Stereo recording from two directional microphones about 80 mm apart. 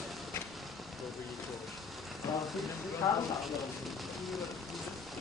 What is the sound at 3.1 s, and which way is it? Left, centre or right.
Speech, left.